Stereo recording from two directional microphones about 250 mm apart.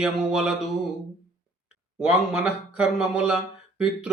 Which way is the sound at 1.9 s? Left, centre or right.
Centre.